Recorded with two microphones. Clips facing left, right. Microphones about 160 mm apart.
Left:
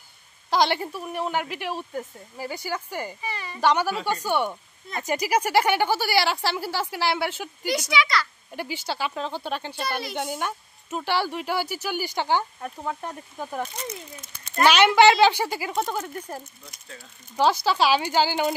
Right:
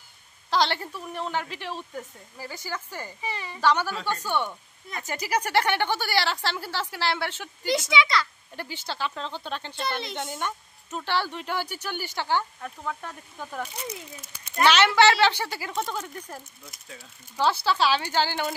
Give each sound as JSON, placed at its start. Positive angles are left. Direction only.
{"t": 0.5, "sound": "speech", "side_deg": 15}
{"t": 3.3, "sound": "a woman's voice", "side_deg": -20}
{"t": 3.6, "sound": "speech", "side_deg": 10}
{"t": 7.7, "sound": "a child's voice", "side_deg": -25}
{"t": 8.5, "sound": "speech", "side_deg": 10}
{"t": 13.7, "sound": "speech", "side_deg": -10}
{"t": 14.6, "sound": "speech", "side_deg": 10}
{"t": 16.6, "sound": "speech", "side_deg": 0}
{"t": 17.4, "sound": "speech", "side_deg": 15}